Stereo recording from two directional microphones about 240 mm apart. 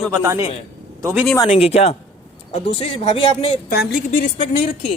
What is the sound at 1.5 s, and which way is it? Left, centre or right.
A woman's voice, left.